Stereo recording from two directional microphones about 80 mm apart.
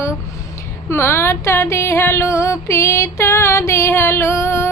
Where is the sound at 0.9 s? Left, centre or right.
Left.